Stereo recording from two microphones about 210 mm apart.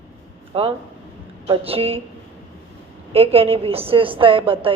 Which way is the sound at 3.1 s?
30° right (ahead or behind).